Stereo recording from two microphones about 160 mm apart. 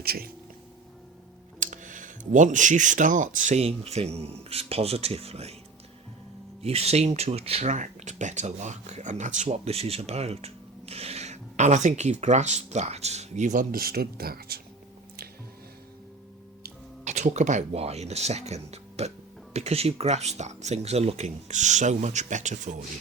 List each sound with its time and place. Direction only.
0.0 s speech: 70° right (ahead or behind)
1.5 s speech: 55° right (ahead or behind)
6.6 s speech: 40° right (ahead or behind); by 14.6 s 70° right (ahead or behind)
17.0 s speech: 45° right (ahead or behind)